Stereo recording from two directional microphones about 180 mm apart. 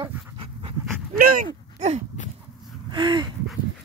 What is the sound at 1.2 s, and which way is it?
Speech, 55° right (ahead or behind).